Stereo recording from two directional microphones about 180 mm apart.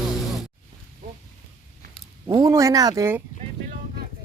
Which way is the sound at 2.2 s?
20° right (ahead or behind).